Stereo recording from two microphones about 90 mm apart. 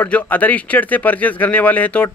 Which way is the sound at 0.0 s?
20° left (ahead or behind).